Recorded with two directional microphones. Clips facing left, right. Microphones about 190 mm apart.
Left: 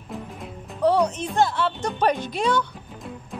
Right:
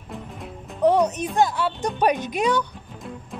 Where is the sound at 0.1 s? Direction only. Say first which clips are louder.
Left 1 dB; centre (ahead or behind).